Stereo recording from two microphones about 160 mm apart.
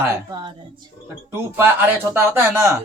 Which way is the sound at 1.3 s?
15° right (ahead or behind).